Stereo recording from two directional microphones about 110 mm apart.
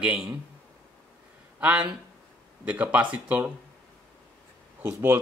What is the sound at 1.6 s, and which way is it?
Speech, 15° right (ahead or behind).